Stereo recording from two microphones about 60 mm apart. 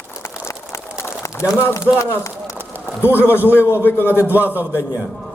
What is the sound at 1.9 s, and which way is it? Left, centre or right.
Speech, left.